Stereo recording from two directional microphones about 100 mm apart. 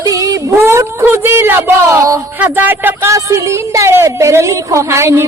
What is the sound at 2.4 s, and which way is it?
A woman's voice, 20° right (ahead or behind).